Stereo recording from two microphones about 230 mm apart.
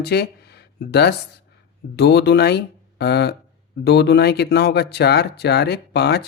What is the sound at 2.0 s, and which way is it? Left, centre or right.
Speech, left.